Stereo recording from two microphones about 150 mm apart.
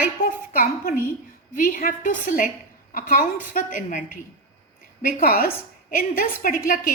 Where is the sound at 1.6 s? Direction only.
70° left (ahead or behind).